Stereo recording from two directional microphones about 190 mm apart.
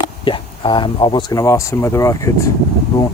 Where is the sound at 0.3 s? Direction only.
25° left (ahead or behind).